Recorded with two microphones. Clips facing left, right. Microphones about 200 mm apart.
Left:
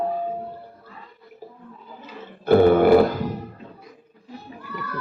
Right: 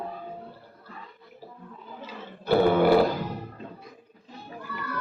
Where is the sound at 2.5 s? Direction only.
50° left (ahead or behind).